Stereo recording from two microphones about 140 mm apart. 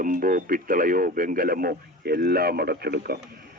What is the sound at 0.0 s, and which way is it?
A man's voice, 75° right (ahead or behind).